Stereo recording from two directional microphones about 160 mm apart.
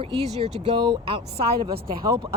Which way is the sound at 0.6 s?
30° right (ahead or behind).